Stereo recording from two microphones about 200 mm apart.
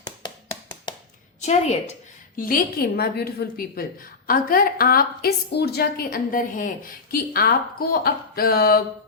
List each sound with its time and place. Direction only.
1.4 s a woman's voice: 35° left (ahead or behind)